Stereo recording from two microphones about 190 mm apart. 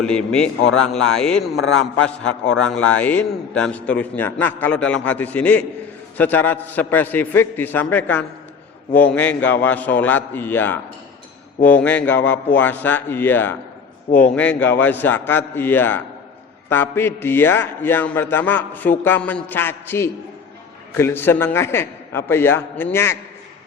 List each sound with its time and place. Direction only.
0.0 s a man's voice: 5° left (ahead or behind)
2.5 s a man's voice: 5° left (ahead or behind)
14.1 s a man's voice: 45° left (ahead or behind)
14.3 s a man's voice: 10° left (ahead or behind)